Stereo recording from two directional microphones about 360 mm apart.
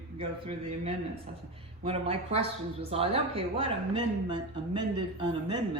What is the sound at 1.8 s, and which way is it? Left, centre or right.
Speech, centre.